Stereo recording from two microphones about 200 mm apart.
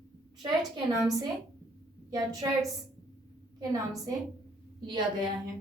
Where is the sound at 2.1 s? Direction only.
15° right (ahead or behind).